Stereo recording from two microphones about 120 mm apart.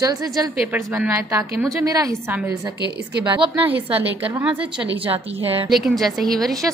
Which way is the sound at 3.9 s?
15° right (ahead or behind).